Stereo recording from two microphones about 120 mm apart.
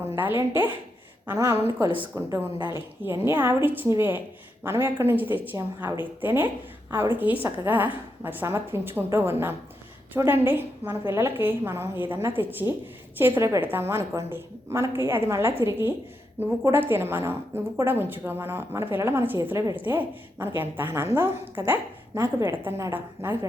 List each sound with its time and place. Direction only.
0.2 s a woman's voice: 15° right (ahead or behind)
19.7 s a woman's voice: 15° right (ahead or behind)